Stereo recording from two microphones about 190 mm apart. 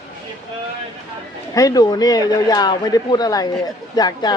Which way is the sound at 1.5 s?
20° left (ahead or behind).